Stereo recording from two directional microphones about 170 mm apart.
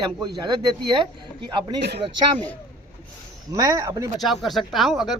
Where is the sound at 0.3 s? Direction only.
25° right (ahead or behind).